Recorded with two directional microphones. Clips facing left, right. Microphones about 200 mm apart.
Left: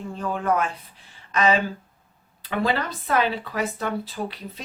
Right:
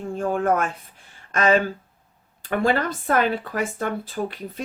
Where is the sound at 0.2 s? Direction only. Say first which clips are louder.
Right 2 dB; 50° right (ahead or behind).